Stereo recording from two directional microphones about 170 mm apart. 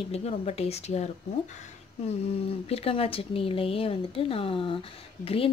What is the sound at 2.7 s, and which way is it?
Speech, 35° left (ahead or behind).